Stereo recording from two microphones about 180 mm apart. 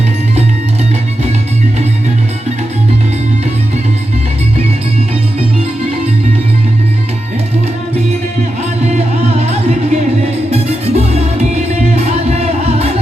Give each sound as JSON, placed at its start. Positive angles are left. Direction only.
{"t": 9.5, "sound": "music", "side_deg": -35}